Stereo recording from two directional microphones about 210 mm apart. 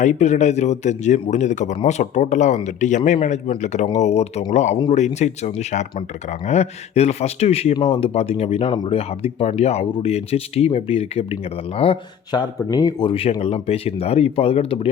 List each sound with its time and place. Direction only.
0.0 s a man's voice: 35° left (ahead or behind)